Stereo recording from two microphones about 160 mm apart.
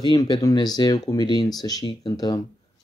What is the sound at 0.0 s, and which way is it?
Speech, 25° left (ahead or behind).